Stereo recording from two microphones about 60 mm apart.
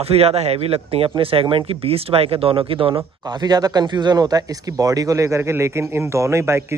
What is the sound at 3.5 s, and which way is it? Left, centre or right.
A man's voice, right.